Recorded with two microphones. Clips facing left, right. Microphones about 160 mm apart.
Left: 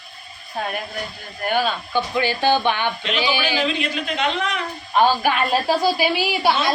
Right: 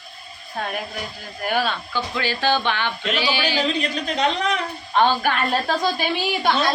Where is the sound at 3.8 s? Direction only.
40° right (ahead or behind).